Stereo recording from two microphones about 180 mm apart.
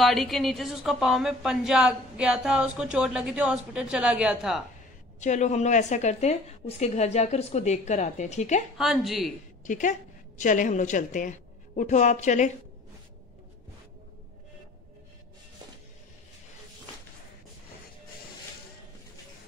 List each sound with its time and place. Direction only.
0.0 s a woman's voice: centre (ahead or behind)
5.2 s a woman's voice: 40° left (ahead or behind)
8.7 s a woman's voice: centre (ahead or behind)
9.7 s a woman's voice: 45° left (ahead or behind)